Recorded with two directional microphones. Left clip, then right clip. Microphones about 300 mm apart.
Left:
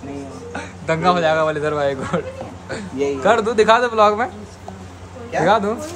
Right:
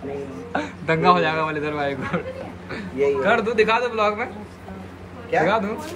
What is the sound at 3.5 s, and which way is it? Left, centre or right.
Speech, centre.